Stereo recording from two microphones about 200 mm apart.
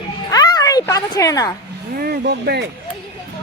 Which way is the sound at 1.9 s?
50° right (ahead or behind).